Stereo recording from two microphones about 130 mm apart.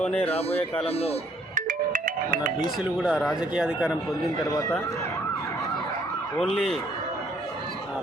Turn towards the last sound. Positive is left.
turn(degrees=5)  # may be behind; listen again after turning